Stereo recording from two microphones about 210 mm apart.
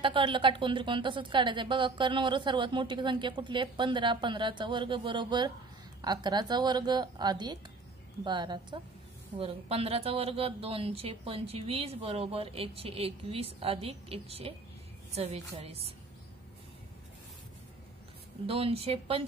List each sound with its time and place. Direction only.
0.0 s a woman's voice: 25° right (ahead or behind)
18.5 s a woman's voice: 25° right (ahead or behind)